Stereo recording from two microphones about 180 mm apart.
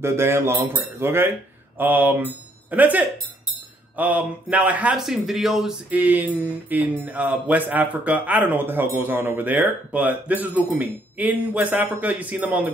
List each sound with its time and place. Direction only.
0.0 s a man's voice: 15° right (ahead or behind)